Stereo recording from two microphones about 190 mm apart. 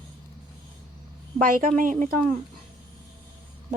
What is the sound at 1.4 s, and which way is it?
Speech, 45° right (ahead or behind).